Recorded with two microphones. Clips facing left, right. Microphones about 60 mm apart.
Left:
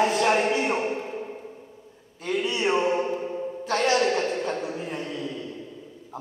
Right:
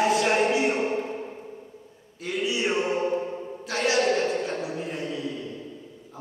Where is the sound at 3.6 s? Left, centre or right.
Centre.